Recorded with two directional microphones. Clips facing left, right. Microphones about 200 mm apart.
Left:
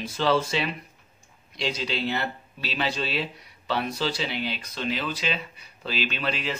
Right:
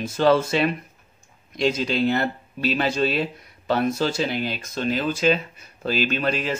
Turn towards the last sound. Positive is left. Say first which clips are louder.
# right 6 dB
turn(degrees=-45)  # may be behind; listen again after turning